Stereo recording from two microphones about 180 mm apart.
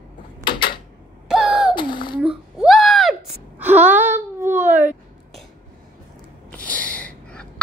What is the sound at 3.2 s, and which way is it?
Wail, 10° right (ahead or behind).